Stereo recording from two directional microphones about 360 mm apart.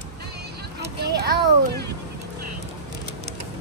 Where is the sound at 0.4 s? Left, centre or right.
Right.